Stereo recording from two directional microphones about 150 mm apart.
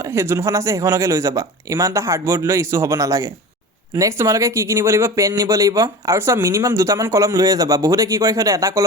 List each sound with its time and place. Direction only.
0.0 s speech: 15° right (ahead or behind)